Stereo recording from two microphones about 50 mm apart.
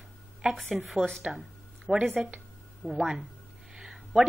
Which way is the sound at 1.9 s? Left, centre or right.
Centre.